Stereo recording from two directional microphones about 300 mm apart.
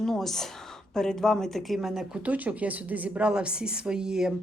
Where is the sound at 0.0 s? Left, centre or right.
Centre.